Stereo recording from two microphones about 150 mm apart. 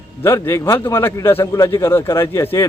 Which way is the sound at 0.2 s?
15° left (ahead or behind).